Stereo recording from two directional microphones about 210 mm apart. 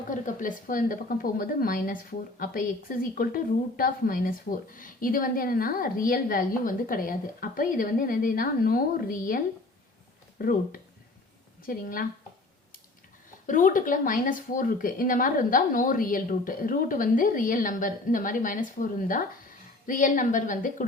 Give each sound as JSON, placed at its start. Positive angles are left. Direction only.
{"t": 0.1, "sound": "a woman's voice", "side_deg": 40}
{"t": 13.5, "sound": "speech", "side_deg": 40}